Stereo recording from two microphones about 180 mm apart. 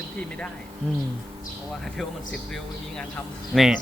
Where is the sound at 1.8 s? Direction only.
Centre (ahead or behind).